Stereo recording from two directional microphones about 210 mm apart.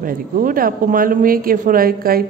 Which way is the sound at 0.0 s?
40° right (ahead or behind).